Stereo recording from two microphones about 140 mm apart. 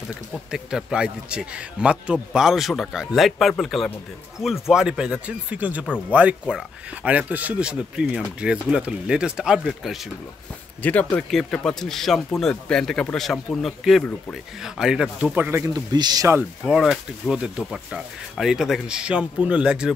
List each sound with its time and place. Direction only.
0.5 s a man's voice: 5° right (ahead or behind)
10.8 s a man's voice: 10° left (ahead or behind); by 15.6 s 10° right (ahead or behind)
15.6 s a man's voice: 30° right (ahead or behind)
16.6 s a man's voice: centre (ahead or behind)